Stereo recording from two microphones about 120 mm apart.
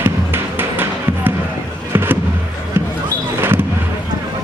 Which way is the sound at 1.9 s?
20° right (ahead or behind).